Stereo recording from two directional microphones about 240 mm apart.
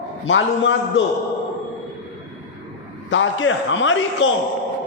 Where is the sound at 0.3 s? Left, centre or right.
Left.